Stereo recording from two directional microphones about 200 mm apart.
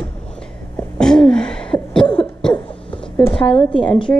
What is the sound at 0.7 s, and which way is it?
Sneeze, 5° left (ahead or behind).